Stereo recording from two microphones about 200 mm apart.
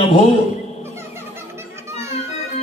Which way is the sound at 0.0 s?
35° left (ahead or behind).